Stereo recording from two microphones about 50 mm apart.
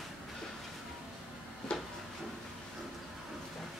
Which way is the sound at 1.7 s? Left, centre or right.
Centre.